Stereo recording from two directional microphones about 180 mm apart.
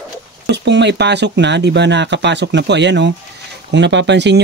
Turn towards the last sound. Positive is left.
turn(degrees=-75)  # may be behind; listen again after turning